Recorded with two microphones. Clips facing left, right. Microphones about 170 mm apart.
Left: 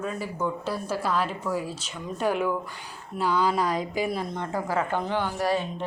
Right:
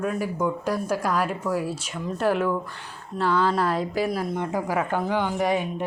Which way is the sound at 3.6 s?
5° right (ahead or behind).